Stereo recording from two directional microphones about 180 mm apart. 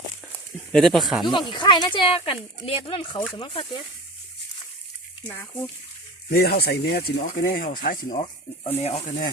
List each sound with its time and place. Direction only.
0.7 s speech: centre (ahead or behind)
1.3 s speech: 25° left (ahead or behind)
5.4 s speech: 10° left (ahead or behind)
6.3 s speech: 60° left (ahead or behind)
8.6 s speech: 35° left (ahead or behind)